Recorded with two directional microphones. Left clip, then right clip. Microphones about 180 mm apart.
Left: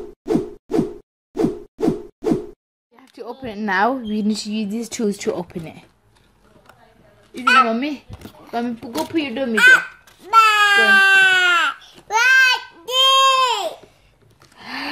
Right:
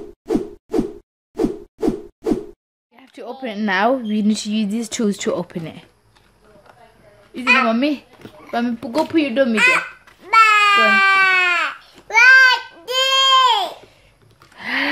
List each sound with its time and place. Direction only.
0.2 s whoosh: centre (ahead or behind)
3.0 s a sound: 10° right (ahead or behind)
3.4 s speech: 15° right (ahead or behind)
7.6 s speech: 15° right (ahead or behind)
9.6 s speech: 10° right (ahead or behind)
10.3 s baby cry: centre (ahead or behind)
12.8 s goat: 15° right (ahead or behind)
14.6 s a sound: 25° right (ahead or behind)